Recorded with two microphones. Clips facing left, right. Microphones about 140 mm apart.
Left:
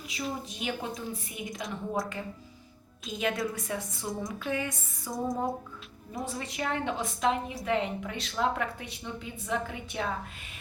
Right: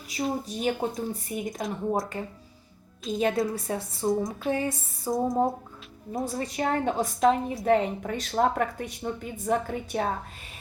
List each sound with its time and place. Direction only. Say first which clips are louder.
0.1 s speech: right 7 dB; 40° right (ahead or behind)
3.1 s a woman's voice: right 6 dB; 30° right (ahead or behind)